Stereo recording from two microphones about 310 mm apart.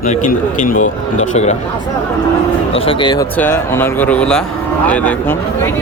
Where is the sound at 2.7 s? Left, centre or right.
Centre.